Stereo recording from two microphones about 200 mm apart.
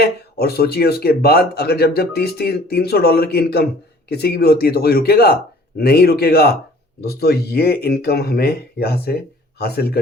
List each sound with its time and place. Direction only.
0.0 s speech: 50° left (ahead or behind)